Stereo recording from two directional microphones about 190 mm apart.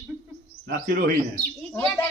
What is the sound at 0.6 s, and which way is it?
Speech, 50° right (ahead or behind).